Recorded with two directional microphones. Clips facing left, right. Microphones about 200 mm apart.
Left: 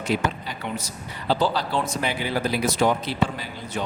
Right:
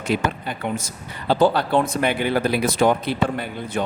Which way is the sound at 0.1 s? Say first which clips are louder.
Right 3 dB; 55° right (ahead or behind).